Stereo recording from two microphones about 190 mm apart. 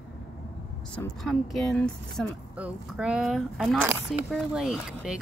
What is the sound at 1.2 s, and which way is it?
Speech, centre (ahead or behind).